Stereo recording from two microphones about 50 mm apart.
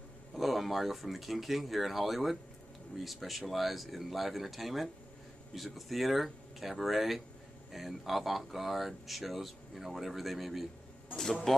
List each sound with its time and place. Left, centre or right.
0.3 s speech: centre
11.5 s music: centre